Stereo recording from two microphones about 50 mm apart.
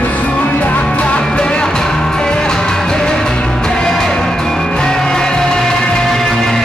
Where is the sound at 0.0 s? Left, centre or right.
Left.